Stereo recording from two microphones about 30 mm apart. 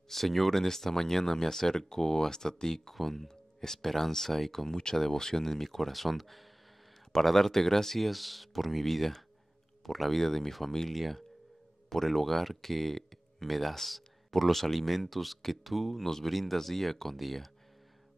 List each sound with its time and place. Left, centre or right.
0.1 s speech: centre
2.9 s speech: centre
4.5 s speech: centre